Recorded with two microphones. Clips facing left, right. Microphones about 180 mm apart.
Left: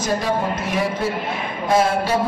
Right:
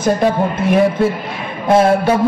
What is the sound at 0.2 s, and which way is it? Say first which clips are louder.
Speech: right 7 dB; 55° right (ahead or behind).